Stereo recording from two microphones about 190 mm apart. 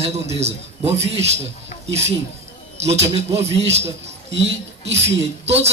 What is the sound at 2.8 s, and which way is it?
Speech, 35° right (ahead or behind).